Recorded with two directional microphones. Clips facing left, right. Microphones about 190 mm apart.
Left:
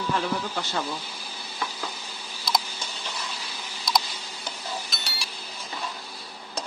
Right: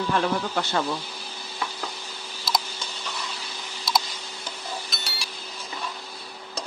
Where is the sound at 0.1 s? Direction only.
65° right (ahead or behind).